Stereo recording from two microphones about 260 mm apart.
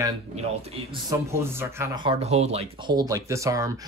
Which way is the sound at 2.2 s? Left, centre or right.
Right.